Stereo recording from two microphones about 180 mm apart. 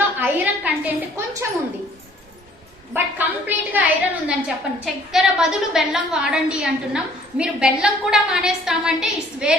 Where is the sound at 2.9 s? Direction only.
10° right (ahead or behind).